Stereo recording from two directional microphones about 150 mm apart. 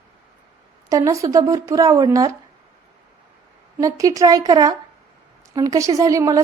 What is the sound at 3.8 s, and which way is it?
A woman's voice, 25° right (ahead or behind).